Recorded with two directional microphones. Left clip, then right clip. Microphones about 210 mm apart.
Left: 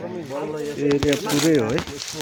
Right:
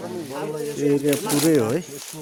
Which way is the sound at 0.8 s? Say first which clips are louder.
Even; centre (ahead or behind).